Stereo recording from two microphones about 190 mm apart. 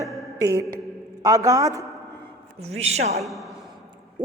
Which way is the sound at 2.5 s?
35° right (ahead or behind).